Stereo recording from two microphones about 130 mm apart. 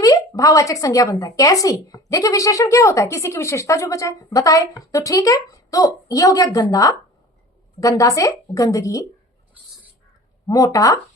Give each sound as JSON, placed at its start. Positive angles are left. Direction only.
{"t": 0.0, "sound": "speech", "side_deg": 25}
{"t": 10.4, "sound": "speech", "side_deg": 25}